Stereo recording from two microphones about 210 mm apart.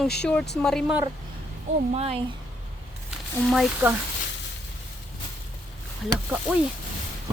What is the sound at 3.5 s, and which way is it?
Speech, centre (ahead or behind).